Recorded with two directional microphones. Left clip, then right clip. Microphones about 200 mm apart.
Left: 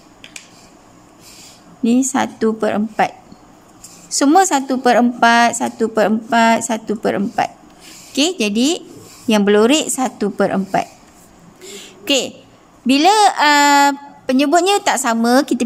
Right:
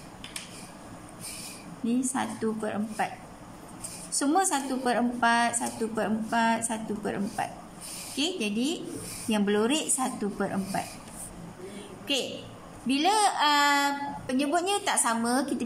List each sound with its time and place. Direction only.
1.9 s a woman's voice: 50° left (ahead or behind)
4.1 s a woman's voice: 50° left (ahead or behind)
12.0 s a sound: 55° left (ahead or behind)
12.8 s a woman's voice: 55° left (ahead or behind)